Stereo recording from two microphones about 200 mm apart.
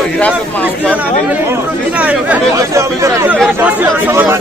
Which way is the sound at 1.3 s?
10° right (ahead or behind).